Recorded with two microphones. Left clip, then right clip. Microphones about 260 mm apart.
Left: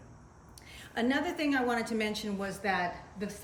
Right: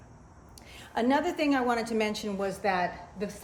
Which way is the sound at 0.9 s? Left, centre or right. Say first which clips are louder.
Right 4 dB; centre.